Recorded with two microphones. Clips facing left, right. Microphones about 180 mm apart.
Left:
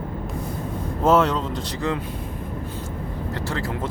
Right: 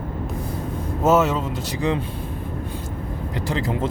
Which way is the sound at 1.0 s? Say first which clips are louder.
Even; 5° right (ahead or behind).